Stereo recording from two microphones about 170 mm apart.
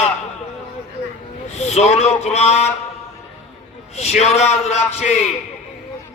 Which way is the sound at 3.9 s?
40° left (ahead or behind).